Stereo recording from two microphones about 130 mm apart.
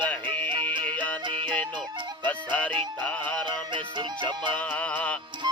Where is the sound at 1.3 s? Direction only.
40° right (ahead or behind).